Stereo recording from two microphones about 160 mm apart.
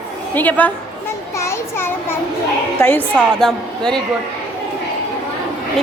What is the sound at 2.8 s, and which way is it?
A woman's voice, 15° left (ahead or behind).